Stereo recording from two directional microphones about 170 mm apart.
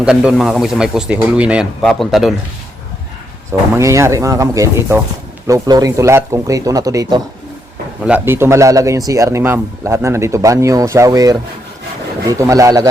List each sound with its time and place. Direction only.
0.0 s a man's voice: 5° right (ahead or behind)
3.8 s speech: 15° right (ahead or behind)